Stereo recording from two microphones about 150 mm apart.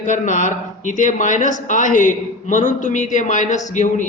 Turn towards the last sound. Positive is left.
turn(degrees=55)  # may be behind; listen again after turning